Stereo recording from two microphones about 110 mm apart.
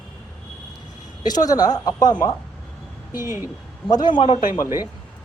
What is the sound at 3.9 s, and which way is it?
Speech, 40° left (ahead or behind).